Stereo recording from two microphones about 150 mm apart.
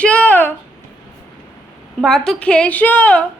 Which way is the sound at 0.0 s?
10° left (ahead or behind).